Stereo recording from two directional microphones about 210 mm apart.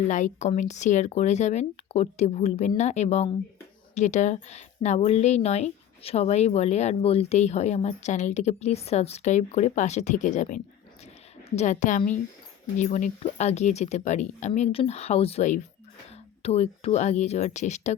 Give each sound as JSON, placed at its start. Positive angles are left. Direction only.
{"t": 0.1, "sound": "a woman's voice", "side_deg": 35}